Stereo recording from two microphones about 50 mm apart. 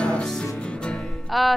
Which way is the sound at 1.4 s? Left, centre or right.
Centre.